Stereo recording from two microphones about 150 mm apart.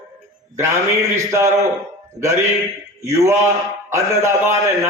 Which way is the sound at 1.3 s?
20° right (ahead or behind).